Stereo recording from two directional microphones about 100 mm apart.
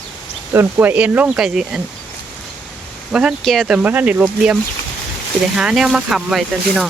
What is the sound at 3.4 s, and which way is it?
Speech, 5° left (ahead or behind).